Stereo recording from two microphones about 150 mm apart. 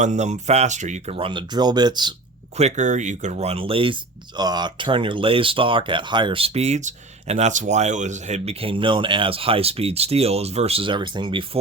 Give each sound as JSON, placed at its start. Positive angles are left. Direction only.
{"t": 0.0, "sound": "speech", "side_deg": -50}
{"t": 1.1, "sound": "speech", "side_deg": -35}
{"t": 2.6, "sound": "speech", "side_deg": -50}